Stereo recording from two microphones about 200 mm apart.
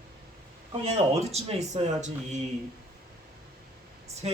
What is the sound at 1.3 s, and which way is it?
Speech, 35° right (ahead or behind).